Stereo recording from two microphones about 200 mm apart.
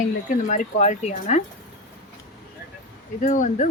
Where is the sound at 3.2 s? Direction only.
40° left (ahead or behind).